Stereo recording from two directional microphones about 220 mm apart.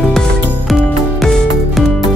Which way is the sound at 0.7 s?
Centre (ahead or behind).